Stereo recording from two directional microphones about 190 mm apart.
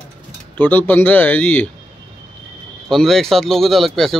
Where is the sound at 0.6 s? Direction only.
10° left (ahead or behind).